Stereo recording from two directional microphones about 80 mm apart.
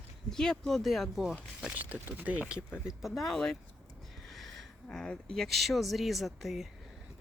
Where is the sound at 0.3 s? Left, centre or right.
Centre.